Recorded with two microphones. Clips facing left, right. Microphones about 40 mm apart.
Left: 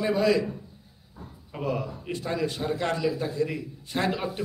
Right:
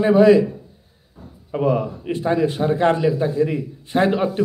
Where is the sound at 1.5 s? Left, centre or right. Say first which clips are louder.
Right 10 dB; right.